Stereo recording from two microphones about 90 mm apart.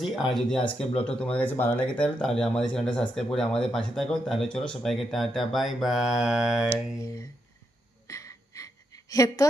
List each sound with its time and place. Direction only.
0.0 s speech: 5° right (ahead or behind)
0.6 s speech: 15° left (ahead or behind); by 6.7 s 5° right (ahead or behind)
6.7 s mantra: 35° left (ahead or behind)
8.0 s a sound: 35° left (ahead or behind)